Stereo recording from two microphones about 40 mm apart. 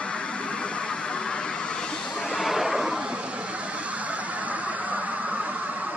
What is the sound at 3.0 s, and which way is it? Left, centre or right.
Vehicle, right.